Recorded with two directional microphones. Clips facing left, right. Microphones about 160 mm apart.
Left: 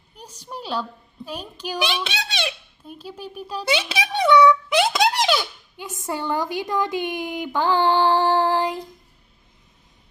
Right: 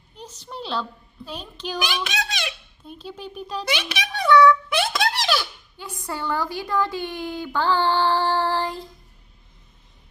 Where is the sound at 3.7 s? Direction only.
25° left (ahead or behind).